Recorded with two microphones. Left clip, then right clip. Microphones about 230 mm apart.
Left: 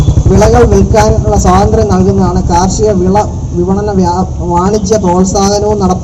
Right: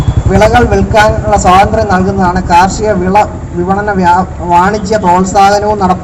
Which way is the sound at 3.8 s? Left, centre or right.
Right.